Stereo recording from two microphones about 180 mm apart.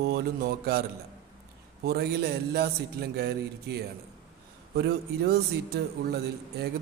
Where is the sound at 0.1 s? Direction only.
60° right (ahead or behind).